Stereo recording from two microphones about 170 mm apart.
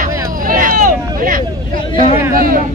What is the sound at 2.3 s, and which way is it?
Speech, 55° right (ahead or behind).